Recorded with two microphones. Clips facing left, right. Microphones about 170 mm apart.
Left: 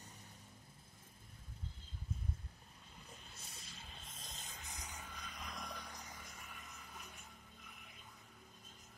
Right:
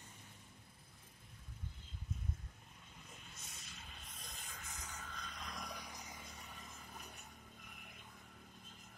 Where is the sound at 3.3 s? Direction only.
35° left (ahead or behind); by 5.2 s 15° left (ahead or behind).